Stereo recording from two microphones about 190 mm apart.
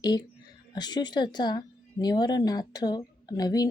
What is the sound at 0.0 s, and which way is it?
Speech, 20° left (ahead or behind).